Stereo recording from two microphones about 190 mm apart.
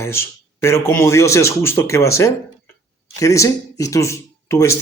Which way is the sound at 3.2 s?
15° left (ahead or behind).